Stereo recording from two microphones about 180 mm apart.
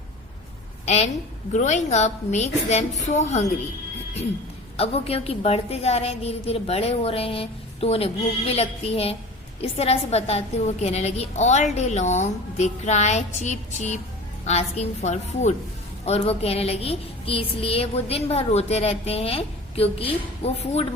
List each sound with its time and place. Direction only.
0.9 s a woman's voice: 40° left (ahead or behind)
4.8 s speech: 35° left (ahead or behind)